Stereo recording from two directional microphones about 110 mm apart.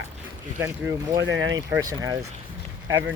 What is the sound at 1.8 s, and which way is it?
Speech, 35° right (ahead or behind).